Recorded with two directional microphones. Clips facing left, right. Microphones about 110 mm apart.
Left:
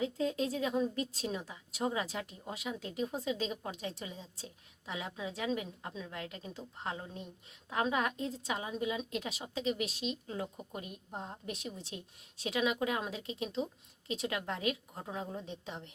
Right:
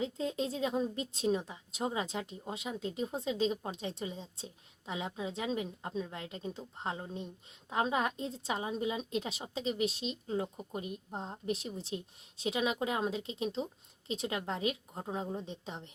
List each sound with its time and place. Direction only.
0.0 s a woman's voice: 25° right (ahead or behind)